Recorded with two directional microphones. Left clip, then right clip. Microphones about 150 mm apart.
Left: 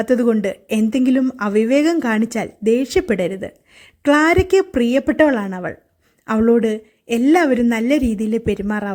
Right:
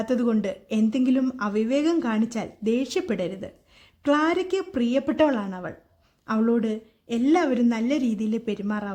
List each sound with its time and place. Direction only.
0.0 s speech: 30° left (ahead or behind)